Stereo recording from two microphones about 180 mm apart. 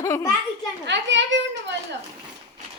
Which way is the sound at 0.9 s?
90° right.